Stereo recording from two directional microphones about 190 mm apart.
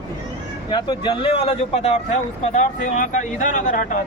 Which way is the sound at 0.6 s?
25° left (ahead or behind).